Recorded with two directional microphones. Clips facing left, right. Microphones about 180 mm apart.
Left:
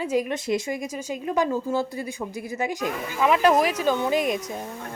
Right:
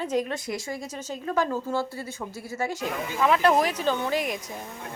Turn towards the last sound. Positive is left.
turn(degrees=20)  # may be behind; listen again after turning